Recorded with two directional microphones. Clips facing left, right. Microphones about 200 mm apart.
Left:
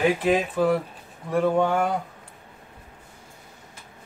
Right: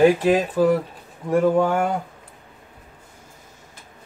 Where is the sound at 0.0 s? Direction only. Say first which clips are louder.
Right 5 dB; 40° right (ahead or behind).